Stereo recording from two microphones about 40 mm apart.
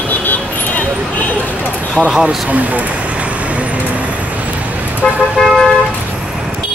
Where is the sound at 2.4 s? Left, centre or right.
Right.